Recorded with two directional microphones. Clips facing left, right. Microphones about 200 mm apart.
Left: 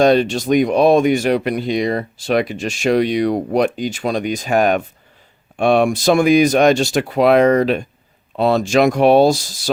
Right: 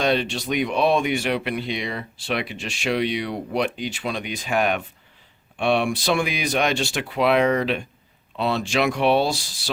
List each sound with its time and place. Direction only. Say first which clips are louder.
0.0 s speech: left 9 dB; 45° left (ahead or behind)